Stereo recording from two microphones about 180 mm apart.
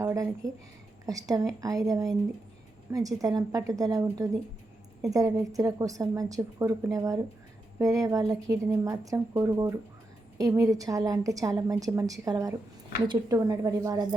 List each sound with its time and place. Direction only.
0.0 s a woman's voice: 15° right (ahead or behind)